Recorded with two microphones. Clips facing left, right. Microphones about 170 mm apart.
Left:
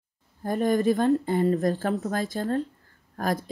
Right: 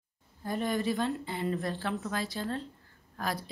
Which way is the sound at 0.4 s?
45° left (ahead or behind).